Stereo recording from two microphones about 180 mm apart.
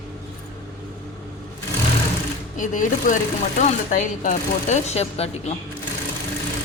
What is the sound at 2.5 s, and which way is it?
Speech, 45° left (ahead or behind).